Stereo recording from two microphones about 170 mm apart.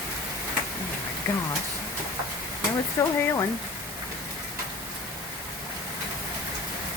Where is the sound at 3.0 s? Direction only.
15° left (ahead or behind).